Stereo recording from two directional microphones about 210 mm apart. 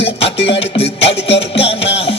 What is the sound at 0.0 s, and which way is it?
Music, 30° left (ahead or behind).